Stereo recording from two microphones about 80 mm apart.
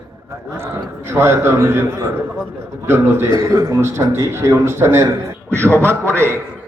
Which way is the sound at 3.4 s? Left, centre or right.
Right.